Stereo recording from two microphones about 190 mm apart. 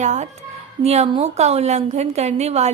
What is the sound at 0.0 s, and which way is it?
A woman's voice, 40° right (ahead or behind).